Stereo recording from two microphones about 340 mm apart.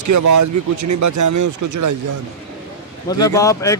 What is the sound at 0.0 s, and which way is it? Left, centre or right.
Speech, right.